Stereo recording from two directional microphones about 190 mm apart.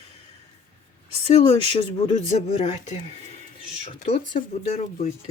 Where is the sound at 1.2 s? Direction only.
30° left (ahead or behind).